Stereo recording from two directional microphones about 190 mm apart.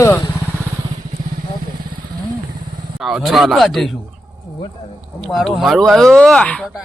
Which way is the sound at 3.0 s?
Centre (ahead or behind).